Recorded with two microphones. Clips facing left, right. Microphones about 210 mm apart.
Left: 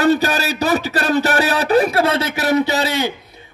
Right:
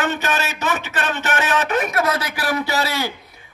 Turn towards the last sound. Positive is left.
turn(degrees=20)  # may be behind; listen again after turning